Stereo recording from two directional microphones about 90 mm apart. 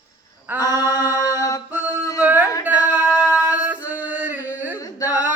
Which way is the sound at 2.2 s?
20° right (ahead or behind).